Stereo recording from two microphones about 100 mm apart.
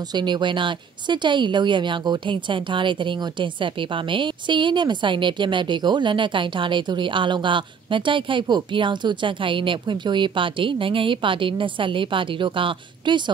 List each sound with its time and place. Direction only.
0.1 s speech: 50° right (ahead or behind)